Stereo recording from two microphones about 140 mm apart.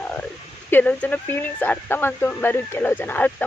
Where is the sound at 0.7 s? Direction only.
10° left (ahead or behind).